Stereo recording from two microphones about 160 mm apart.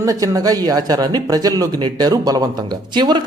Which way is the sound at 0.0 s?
20° right (ahead or behind).